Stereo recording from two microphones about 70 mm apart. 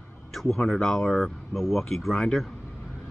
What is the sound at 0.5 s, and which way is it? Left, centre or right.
Speech, centre.